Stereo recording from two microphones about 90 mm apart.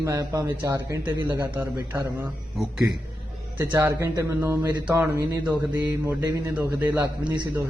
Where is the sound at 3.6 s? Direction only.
30° right (ahead or behind).